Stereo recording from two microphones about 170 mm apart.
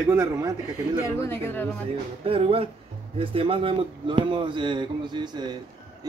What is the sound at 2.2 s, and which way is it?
Speech, 35° right (ahead or behind).